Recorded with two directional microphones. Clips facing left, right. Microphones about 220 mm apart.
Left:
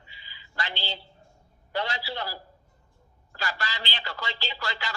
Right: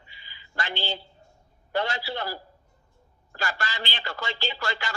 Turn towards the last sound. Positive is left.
turn(degrees=-50)  # may be behind; listen again after turning